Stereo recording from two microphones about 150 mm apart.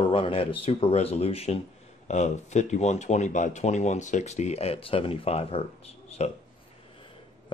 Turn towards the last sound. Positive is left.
turn(degrees=45)  # may be behind; listen again after turning